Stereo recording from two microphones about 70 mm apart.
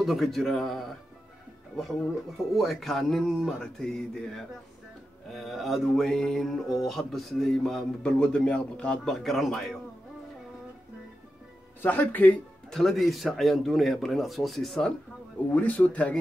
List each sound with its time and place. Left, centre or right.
0.0 s mantra: centre
11.8 s speech: left
12.6 s mantra: centre
15.5 s speech: left